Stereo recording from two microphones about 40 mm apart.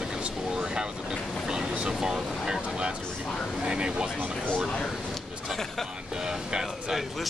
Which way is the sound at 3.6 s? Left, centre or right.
Right.